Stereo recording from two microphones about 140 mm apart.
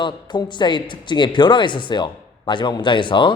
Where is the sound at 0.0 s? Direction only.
35° left (ahead or behind).